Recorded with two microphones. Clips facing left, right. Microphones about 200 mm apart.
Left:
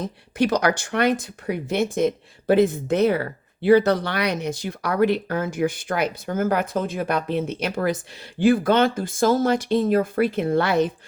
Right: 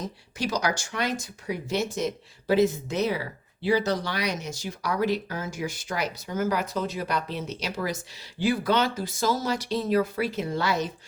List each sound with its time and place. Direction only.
0.0 s speech: 55° left (ahead or behind)